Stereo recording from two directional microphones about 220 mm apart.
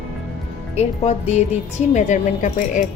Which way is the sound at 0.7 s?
30° left (ahead or behind).